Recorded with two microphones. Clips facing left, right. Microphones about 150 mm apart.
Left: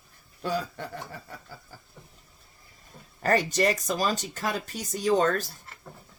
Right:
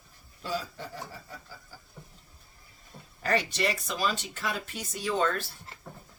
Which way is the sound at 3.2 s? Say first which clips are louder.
Left 5 dB; 45° left (ahead or behind).